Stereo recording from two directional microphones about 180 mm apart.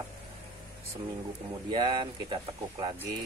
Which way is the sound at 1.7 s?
30° right (ahead or behind).